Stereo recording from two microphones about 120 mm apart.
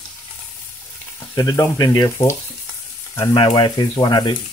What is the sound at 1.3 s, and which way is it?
Speech, 35° left (ahead or behind).